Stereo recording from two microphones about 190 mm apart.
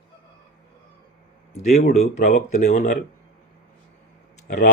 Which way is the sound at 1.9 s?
35° left (ahead or behind).